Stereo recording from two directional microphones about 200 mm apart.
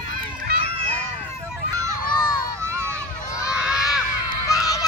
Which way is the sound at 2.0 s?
20° left (ahead or behind).